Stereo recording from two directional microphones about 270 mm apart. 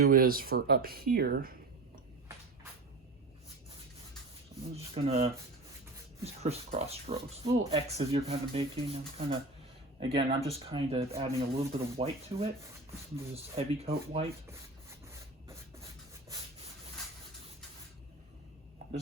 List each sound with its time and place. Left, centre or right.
0.0 s speech: right
4.9 s speech: right